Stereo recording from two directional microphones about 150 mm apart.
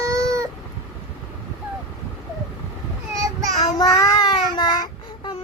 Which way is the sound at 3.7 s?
25° left (ahead or behind).